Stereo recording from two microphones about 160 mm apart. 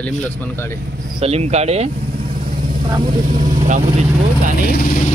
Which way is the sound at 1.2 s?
40° right (ahead or behind).